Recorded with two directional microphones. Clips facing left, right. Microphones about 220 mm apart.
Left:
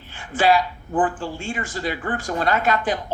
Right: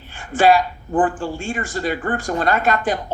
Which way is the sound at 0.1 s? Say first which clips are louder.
Right 4 dB; 50° right (ahead or behind).